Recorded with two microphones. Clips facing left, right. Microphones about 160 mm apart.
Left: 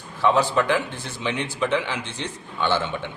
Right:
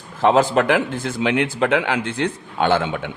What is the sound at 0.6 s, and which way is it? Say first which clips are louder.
Speech: right 4 dB; 70° right (ahead or behind).